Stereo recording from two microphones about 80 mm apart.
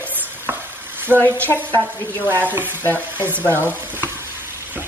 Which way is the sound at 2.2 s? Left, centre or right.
Right.